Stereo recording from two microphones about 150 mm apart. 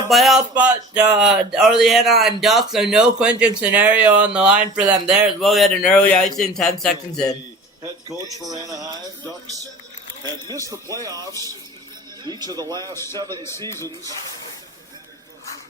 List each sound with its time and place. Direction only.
0.1 s speech: centre (ahead or behind)
8.3 s speech: 25° right (ahead or behind)
10.4 s speech: 25° right (ahead or behind)
12.8 s speech: 15° left (ahead or behind)